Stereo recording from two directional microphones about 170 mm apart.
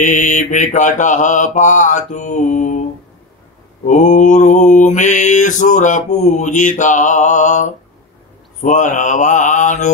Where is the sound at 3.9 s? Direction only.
45° left (ahead or behind).